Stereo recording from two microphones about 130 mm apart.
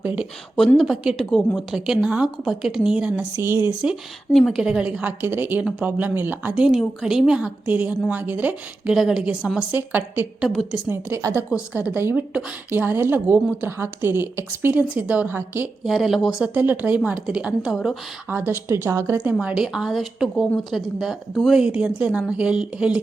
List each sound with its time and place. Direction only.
0.0 s speech: 10° right (ahead or behind)
0.5 s speech: 5° left (ahead or behind)
1.4 s speech: 10° left (ahead or behind)
1.7 s a woman's voice: 5° right (ahead or behind)
4.3 s a woman's voice: centre (ahead or behind); by 10.5 s 15° right (ahead or behind)
10.5 s speech: centre (ahead or behind)
10.8 s a woman's voice: 20° right (ahead or behind)
15.8 s speech: centre (ahead or behind)
16.6 s a woman's voice: 15° right (ahead or behind)
18.3 s a woman's voice: 15° right (ahead or behind)